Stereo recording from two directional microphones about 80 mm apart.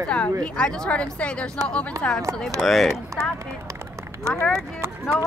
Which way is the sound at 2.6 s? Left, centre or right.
Centre.